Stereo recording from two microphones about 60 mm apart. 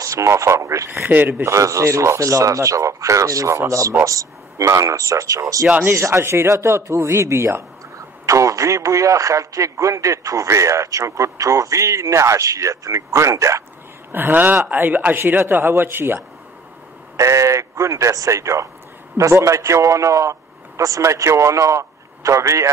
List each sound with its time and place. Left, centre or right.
0.0 s speech: right
0.8 s speech: right
1.4 s speech: right
5.9 s speech: right
8.3 s speech: right
14.1 s speech: right
17.2 s a man's voice: right